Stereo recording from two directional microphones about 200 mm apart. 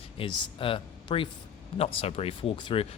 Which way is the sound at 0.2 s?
25° left (ahead or behind).